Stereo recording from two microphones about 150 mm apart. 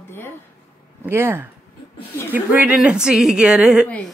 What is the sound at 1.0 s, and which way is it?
A woman's voice, 15° right (ahead or behind).